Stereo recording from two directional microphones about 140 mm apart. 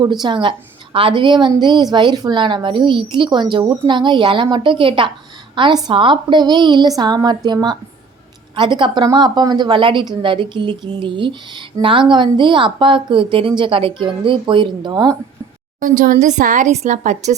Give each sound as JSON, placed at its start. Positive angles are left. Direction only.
{"t": 0.0, "sound": "a woman's voice", "side_deg": -30}
{"t": 15.8, "sound": "speech", "side_deg": -65}